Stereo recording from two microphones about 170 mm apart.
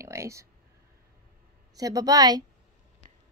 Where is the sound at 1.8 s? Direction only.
20° right (ahead or behind).